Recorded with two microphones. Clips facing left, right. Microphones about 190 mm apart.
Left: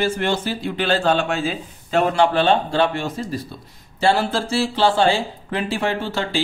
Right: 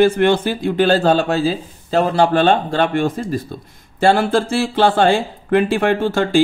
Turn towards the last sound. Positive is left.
turn(degrees=-50)  # may be behind; listen again after turning